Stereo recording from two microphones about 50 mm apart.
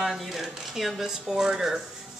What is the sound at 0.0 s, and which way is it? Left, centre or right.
Speech, centre.